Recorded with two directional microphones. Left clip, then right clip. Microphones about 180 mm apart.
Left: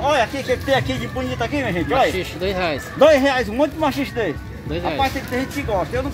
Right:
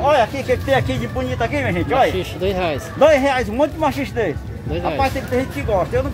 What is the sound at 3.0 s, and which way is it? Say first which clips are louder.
Speech: even; 35° left (ahead or behind).